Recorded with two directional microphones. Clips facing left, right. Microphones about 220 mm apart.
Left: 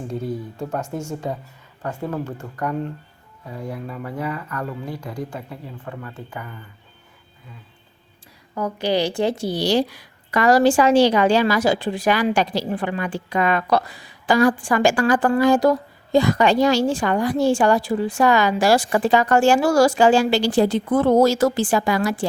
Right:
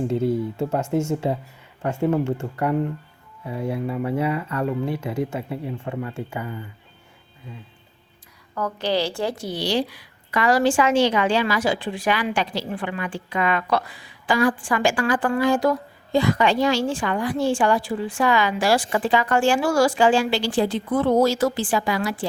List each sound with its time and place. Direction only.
0.1 s speech: 25° right (ahead or behind)
8.5 s a woman's voice: 10° left (ahead or behind)
9.6 s a woman's voice: 45° left (ahead or behind)